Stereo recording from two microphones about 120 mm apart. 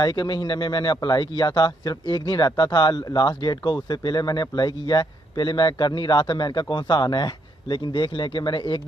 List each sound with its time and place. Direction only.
0.0 s speech: 40° left (ahead or behind)